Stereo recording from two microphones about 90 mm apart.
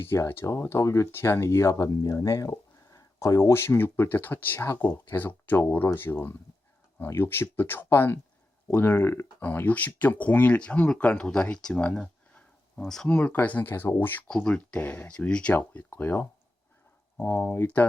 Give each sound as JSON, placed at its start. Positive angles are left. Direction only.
{"t": 0.0, "sound": "speech", "side_deg": 25}
{"t": 3.5, "sound": "speech", "side_deg": 25}
{"t": 14.3, "sound": "speech", "side_deg": 10}